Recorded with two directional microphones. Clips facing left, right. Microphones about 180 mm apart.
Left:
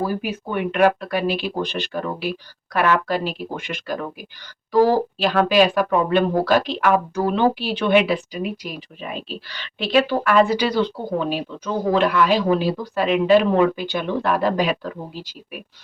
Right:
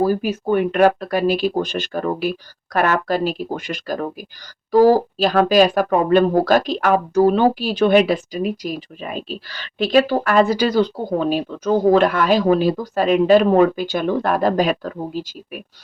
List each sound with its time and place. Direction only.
0.0 s speech: 40° right (ahead or behind)